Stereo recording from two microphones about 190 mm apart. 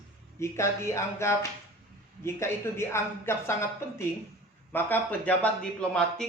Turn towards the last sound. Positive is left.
turn(degrees=5)  # may be behind; listen again after turning